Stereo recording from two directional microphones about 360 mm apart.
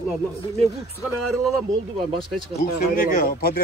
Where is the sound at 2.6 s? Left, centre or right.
Left.